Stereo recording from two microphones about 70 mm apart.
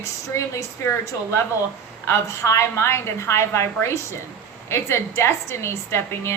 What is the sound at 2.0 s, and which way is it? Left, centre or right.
A woman's voice, left.